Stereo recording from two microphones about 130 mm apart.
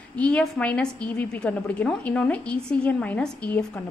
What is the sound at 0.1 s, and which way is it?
A woman's voice, 10° left (ahead or behind).